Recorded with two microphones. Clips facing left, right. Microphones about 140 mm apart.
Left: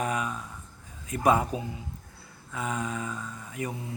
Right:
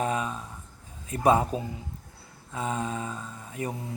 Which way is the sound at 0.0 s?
30° right (ahead or behind).